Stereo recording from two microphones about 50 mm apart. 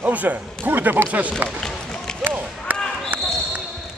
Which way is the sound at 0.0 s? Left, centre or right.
Right.